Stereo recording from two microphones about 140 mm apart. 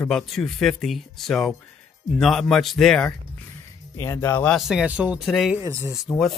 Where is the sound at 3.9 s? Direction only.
20° left (ahead or behind).